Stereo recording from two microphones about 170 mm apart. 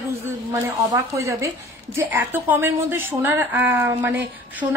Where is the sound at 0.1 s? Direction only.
15° right (ahead or behind).